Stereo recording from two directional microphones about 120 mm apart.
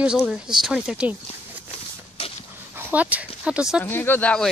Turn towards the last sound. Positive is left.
turn(degrees=10)  # may be behind; listen again after turning